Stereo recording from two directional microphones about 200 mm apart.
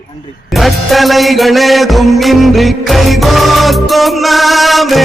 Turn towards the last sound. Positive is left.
turn(degrees=0)  # may be behind; listen again after turning